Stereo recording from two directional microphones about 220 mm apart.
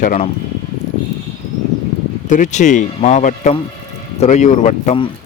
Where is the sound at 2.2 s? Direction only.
35° left (ahead or behind).